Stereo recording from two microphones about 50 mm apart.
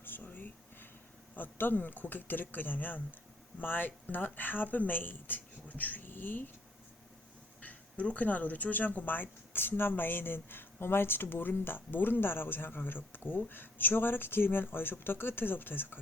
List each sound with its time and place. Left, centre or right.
0.0 s a sound: left
1.4 s speech: left
7.6 s speech: left